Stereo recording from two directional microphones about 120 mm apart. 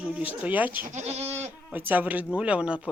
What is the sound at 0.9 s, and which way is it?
Speech, 65° right (ahead or behind).